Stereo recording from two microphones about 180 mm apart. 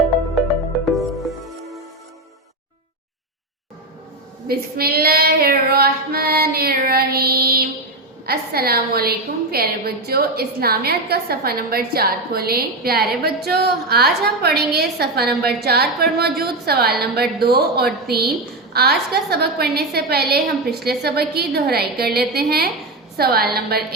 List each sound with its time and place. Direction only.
0.9 s music: centre (ahead or behind)
4.4 s a woman's voice: 60° right (ahead or behind)